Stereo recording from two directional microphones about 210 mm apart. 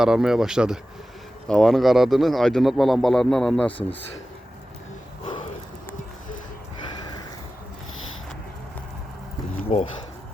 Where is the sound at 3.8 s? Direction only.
25° left (ahead or behind).